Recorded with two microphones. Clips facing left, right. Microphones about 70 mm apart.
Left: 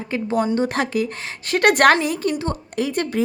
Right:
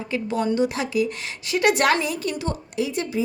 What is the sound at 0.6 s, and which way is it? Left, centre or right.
Speech, left.